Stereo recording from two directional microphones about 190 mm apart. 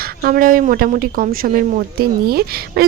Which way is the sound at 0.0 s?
50° right (ahead or behind).